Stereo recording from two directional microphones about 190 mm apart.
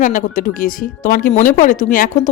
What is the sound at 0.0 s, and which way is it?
A woman's voice, 45° left (ahead or behind).